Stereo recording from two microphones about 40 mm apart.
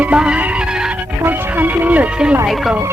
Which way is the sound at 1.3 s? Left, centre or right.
Right.